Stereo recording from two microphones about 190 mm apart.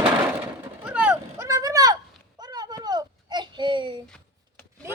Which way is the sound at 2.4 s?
20° right (ahead or behind).